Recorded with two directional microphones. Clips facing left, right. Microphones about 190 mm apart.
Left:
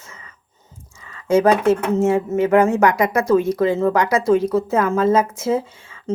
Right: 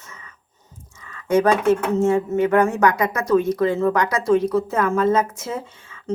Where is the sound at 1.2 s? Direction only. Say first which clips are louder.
Left 2 dB; 25° left (ahead or behind).